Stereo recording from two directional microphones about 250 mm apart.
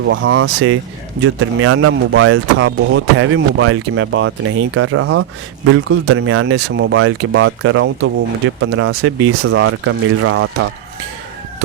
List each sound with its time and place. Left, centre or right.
0.0 s speech: right